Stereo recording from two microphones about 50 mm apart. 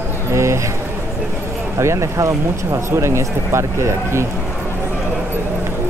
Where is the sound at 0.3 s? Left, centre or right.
Right.